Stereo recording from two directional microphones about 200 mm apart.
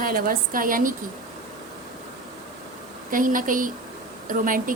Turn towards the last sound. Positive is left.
turn(degrees=-45)  # may be behind; listen again after turning